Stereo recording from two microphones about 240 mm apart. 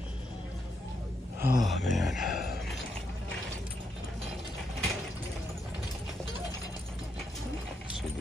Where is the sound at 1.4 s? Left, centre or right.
Centre.